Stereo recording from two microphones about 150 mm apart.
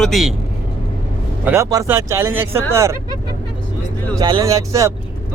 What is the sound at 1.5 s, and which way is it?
Speech, 20° right (ahead or behind).